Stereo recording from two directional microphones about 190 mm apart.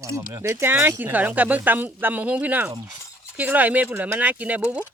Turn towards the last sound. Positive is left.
turn(degrees=-10)  # may be behind; listen again after turning